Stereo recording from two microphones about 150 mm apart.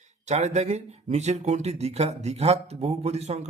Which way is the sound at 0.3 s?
50° right (ahead or behind).